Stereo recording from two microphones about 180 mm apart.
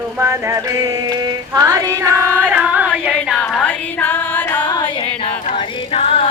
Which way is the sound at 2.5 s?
10° right (ahead or behind).